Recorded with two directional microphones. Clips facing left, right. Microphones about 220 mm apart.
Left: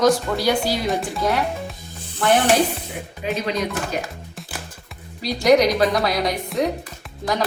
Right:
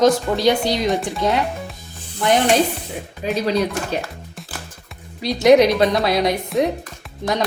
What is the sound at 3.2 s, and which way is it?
Speech, 35° right (ahead or behind).